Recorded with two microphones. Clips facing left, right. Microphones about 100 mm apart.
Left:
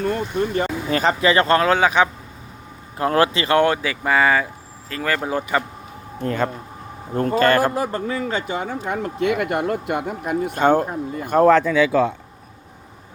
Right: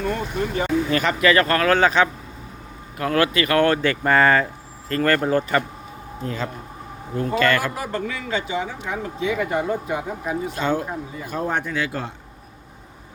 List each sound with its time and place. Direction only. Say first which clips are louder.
0.0 s speech: left 3 dB; 40° left (ahead or behind)
0.9 s speech: left 3 dB; 30° left (ahead or behind); by 2.0 s 15° left (ahead or behind)
3.0 s speech: left 2 dB; 30° left (ahead or behind)
3.8 s speech: right 1 dB; 5° left (ahead or behind)
6.1 s speech: left 6 dB; 60° left (ahead or behind)
7.2 s speech: left 4 dB; 45° left (ahead or behind); by 11.6 s 70° left (ahead or behind)